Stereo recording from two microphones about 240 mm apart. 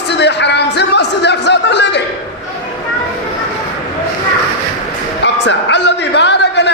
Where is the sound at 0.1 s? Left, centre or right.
Left.